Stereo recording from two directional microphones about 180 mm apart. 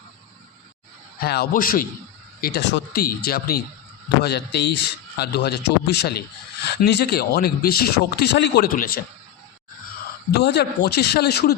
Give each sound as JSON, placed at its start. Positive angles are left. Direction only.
{"t": 1.2, "sound": "speech", "side_deg": 60}
{"t": 2.4, "sound": "a man's voice", "side_deg": 65}
{"t": 4.2, "sound": "a man's voice", "side_deg": 65}
{"t": 10.3, "sound": "a man's voice", "side_deg": 65}